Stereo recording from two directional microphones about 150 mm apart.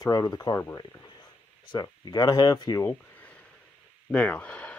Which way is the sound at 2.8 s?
10° left (ahead or behind).